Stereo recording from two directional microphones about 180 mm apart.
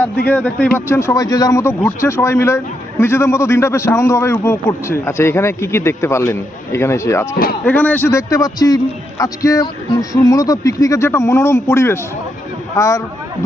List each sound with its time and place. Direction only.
0.3 s a man's voice: 10° left (ahead or behind)